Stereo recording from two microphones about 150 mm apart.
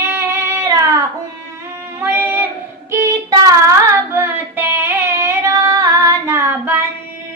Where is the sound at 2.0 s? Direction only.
10° right (ahead or behind).